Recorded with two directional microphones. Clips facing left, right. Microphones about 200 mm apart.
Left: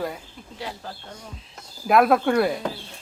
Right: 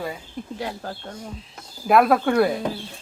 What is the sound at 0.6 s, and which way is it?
Speech, 50° right (ahead or behind).